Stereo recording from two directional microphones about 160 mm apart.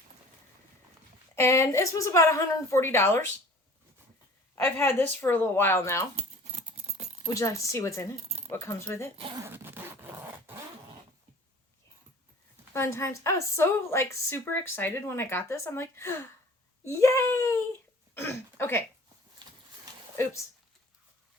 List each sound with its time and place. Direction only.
1.4 s a woman's voice: 15° left (ahead or behind)
4.5 s a woman's voice: 15° left (ahead or behind)
6.1 s keys jangling: 40° right (ahead or behind)
7.3 s a woman's voice: 20° left (ahead or behind)
9.1 s speech: 35° right (ahead or behind)
9.4 s zipper: 15° right (ahead or behind)
12.7 s a woman's voice: 15° left (ahead or behind)
20.2 s a woman's voice: 20° left (ahead or behind)